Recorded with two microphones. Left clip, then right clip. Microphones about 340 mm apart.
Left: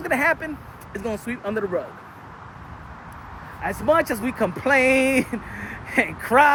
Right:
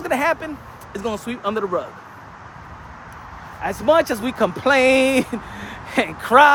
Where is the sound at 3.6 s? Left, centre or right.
Centre.